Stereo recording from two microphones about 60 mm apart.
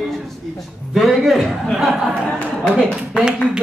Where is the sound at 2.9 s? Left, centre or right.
Centre.